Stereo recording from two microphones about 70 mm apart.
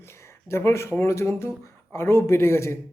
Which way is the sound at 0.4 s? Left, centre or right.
Left.